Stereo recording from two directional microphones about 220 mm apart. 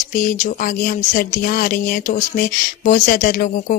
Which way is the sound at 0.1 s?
40° left (ahead or behind).